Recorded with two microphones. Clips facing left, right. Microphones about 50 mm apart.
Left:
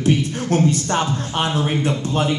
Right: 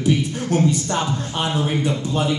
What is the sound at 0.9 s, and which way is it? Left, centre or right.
Speech, left.